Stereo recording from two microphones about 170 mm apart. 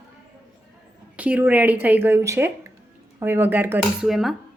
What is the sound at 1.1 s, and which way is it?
A woman's voice, 10° right (ahead or behind).